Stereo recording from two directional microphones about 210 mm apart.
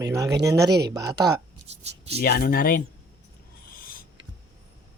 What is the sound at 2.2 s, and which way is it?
Speech, 45° left (ahead or behind).